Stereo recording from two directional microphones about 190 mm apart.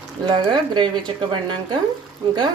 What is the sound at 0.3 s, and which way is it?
Speech, 25° right (ahead or behind).